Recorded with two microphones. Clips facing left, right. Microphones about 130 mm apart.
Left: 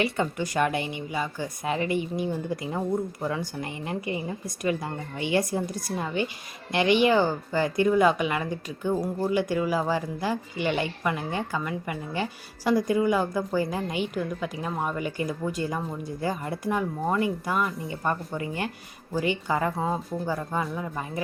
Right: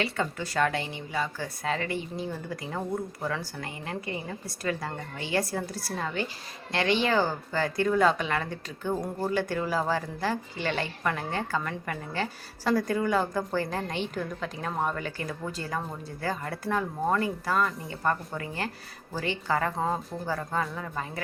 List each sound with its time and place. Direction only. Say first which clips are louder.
0.0 s speech: left 4 dB; 20° left (ahead or behind)